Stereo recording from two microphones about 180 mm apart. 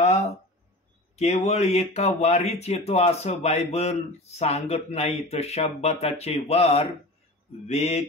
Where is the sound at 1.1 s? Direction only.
40° left (ahead or behind).